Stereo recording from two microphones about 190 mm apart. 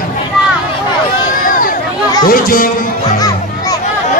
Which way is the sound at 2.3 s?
50° left (ahead or behind).